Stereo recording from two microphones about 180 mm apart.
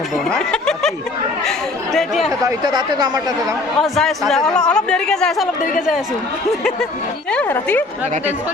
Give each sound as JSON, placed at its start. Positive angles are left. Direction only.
{"t": 0.3, "sound": "speech", "side_deg": 5}
{"t": 2.4, "sound": "speech", "side_deg": -25}
{"t": 3.8, "sound": "speech", "side_deg": 0}
{"t": 7.3, "sound": "speech", "side_deg": 10}